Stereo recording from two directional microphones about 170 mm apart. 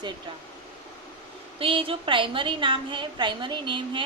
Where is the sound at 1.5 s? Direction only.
30° right (ahead or behind).